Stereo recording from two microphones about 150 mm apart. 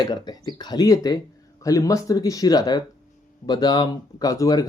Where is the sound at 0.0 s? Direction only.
25° left (ahead or behind).